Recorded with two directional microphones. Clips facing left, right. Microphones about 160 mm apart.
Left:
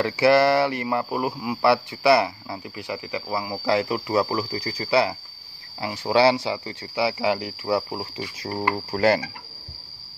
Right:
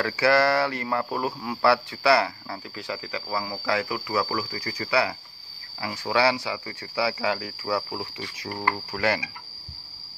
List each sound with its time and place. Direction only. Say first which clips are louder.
0.0 s speech: left 4 dB; 20° left (ahead or behind)
8.9 s speech: left 8 dB; 35° left (ahead or behind)